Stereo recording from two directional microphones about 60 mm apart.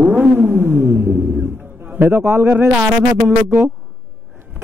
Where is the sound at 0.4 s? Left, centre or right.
Right.